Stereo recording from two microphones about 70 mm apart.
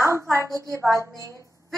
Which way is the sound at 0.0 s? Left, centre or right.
Right.